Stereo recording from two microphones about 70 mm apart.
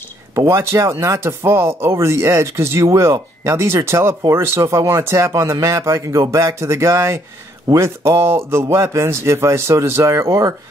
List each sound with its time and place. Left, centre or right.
0.5 s speech: right